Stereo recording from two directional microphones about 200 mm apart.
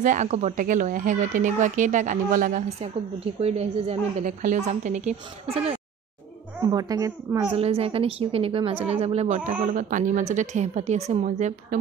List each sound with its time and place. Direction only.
0.0 s speech: 40° right (ahead or behind)
3.3 s speech: 30° right (ahead or behind)
6.7 s a woman's voice: 20° right (ahead or behind)
7.5 s a woman's voice: 30° right (ahead or behind)